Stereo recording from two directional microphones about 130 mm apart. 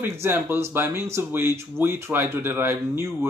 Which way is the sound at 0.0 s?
20° right (ahead or behind).